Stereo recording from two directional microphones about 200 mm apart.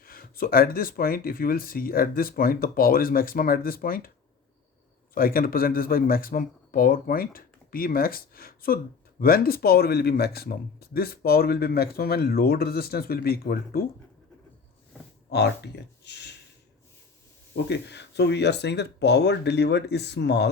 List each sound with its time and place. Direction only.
0.0 s speech: 45° left (ahead or behind)
5.1 s speech: 45° left (ahead or behind)
15.3 s speech: 55° left (ahead or behind)
17.5 s speech: 60° left (ahead or behind)